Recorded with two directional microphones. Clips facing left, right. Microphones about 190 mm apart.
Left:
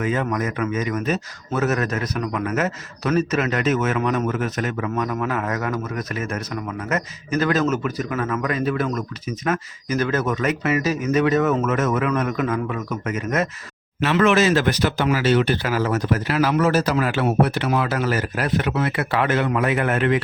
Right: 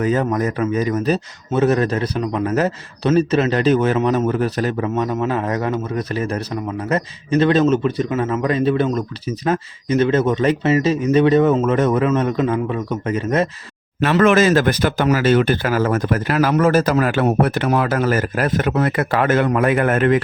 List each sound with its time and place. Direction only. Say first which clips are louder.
0.0 s a man's voice: right 5 dB; 40° right (ahead or behind)
14.0 s speech: right 3 dB; 50° right (ahead or behind)